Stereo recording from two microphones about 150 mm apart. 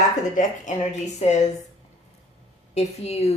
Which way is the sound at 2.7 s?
45° left (ahead or behind).